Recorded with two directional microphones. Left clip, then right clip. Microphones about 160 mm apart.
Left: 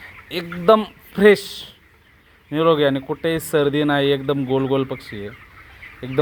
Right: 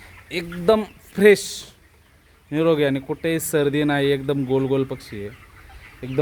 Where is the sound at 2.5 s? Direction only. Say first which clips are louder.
Left 3 dB; 20° right (ahead or behind).